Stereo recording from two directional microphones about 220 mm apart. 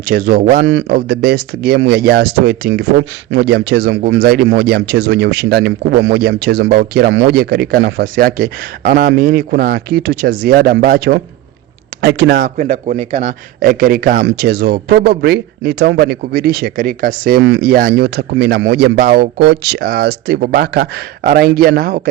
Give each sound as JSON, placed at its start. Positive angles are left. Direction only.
{"t": 0.1, "sound": "a man's voice", "side_deg": -45}